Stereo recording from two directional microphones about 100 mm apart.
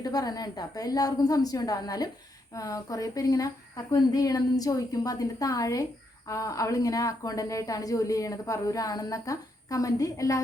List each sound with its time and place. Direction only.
0.0 s speech: 40° left (ahead or behind)